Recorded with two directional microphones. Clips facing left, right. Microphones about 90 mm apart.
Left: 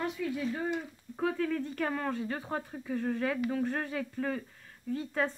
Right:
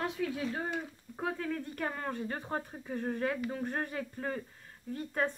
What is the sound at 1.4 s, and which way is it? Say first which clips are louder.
Speech: left 4 dB; 20° right (ahead or behind).